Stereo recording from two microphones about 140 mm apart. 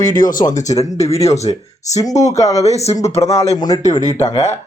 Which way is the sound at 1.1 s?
50° left (ahead or behind).